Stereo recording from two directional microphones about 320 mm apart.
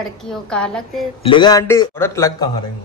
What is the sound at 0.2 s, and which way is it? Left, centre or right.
Speech, centre.